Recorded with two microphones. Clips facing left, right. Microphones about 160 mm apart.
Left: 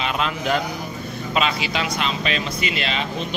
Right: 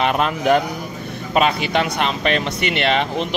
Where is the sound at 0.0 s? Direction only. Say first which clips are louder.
Right 6 dB; 50° right (ahead or behind).